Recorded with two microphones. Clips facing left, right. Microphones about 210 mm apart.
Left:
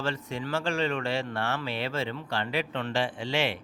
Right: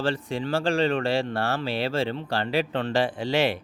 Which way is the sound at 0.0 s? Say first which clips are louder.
Right 5 dB; 30° right (ahead or behind).